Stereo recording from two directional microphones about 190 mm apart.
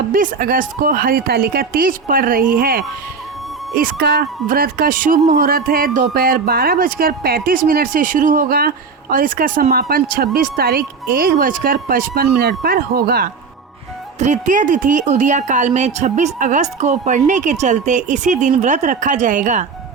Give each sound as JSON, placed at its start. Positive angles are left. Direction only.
{"t": 0.1, "sound": "speech", "side_deg": -50}
{"t": 14.2, "sound": "speech", "side_deg": -40}